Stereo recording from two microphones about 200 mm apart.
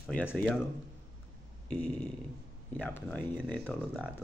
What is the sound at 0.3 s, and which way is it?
Speech, 5° left (ahead or behind).